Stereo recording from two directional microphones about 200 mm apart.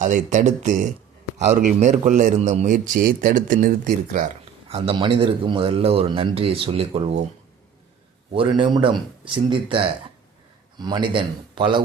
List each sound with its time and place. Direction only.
0.0 s a man's voice: 40° right (ahead or behind)
4.7 s a man's voice: 25° right (ahead or behind)
8.3 s a man's voice: 25° right (ahead or behind)